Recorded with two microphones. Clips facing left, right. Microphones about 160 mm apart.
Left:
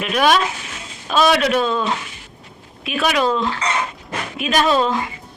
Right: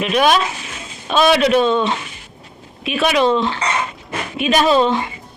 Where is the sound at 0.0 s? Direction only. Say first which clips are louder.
Right 1 dB; centre (ahead or behind).